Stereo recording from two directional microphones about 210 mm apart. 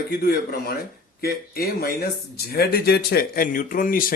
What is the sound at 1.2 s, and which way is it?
Speech, 45° left (ahead or behind).